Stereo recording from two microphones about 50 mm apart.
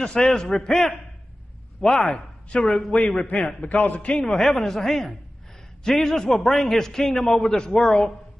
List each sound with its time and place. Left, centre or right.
0.0 s a man's voice: centre
3.3 s a man's voice: left
4.3 s a man's voice: centre